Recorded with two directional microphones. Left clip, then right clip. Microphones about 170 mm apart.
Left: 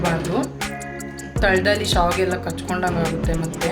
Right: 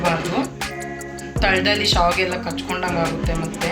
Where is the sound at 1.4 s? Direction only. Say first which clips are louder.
Even; 40° left (ahead or behind).